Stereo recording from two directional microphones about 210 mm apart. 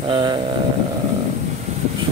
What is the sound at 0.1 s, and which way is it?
Speech, 20° right (ahead or behind).